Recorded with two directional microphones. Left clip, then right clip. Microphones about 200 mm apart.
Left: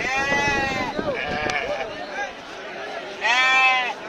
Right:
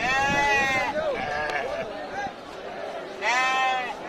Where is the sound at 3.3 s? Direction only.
20° left (ahead or behind).